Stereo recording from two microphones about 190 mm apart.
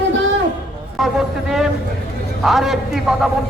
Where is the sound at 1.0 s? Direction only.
Centre (ahead or behind).